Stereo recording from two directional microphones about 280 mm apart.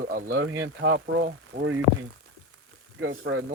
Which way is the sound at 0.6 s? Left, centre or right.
Right.